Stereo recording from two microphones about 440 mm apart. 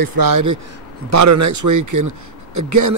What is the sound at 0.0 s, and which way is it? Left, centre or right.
Speech, right.